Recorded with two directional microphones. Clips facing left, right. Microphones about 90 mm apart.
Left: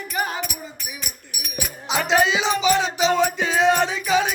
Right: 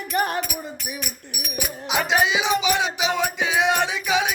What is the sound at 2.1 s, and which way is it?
Music, 10° right (ahead or behind).